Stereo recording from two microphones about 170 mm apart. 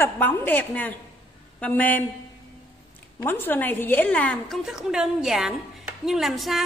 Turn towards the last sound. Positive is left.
turn(degrees=0)  # may be behind; listen again after turning